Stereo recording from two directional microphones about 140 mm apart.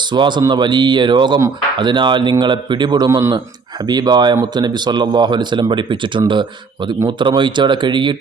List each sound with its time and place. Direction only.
0.1 s speech: 35° right (ahead or behind)